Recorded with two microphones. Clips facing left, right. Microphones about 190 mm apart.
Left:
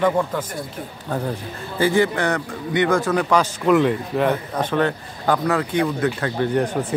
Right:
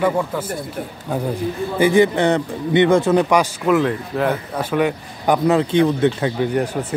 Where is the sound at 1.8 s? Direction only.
20° right (ahead or behind).